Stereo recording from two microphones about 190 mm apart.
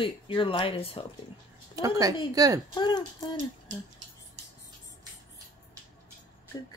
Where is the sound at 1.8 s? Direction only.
20° right (ahead or behind).